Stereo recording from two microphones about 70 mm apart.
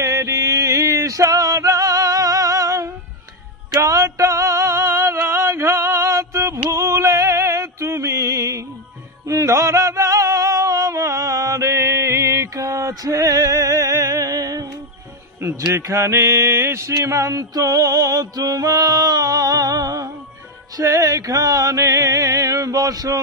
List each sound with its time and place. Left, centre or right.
0.0 s music: right
3.8 s male singing: right
6.7 s music: right
9.2 s a sound: right
15.7 s mantra: right